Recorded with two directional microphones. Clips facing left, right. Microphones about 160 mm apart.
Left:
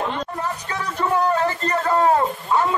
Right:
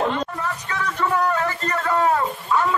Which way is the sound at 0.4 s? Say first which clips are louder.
Even; 30° left (ahead or behind).